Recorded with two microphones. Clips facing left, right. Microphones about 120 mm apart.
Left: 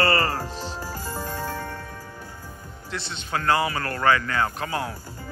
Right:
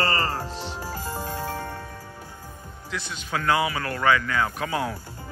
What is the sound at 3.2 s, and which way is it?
Speech, 5° right (ahead or behind).